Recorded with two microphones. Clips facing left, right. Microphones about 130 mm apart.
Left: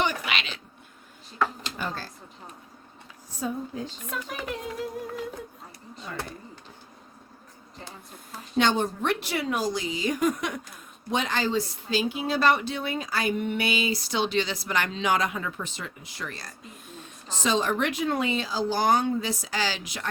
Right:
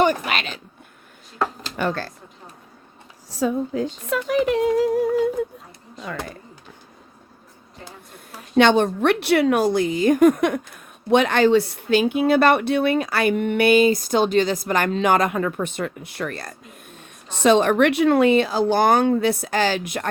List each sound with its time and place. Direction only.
0.0 s speech: 45° right (ahead or behind)
1.7 s speech: 75° right (ahead or behind)
3.2 s speech: 90° right
6.0 s speech: 90° right
8.5 s speech: 70° right (ahead or behind); by 20.1 s 55° right (ahead or behind)